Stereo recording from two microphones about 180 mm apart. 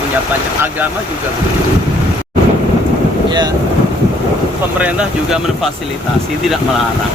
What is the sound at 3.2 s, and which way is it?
Speech, 25° right (ahead or behind).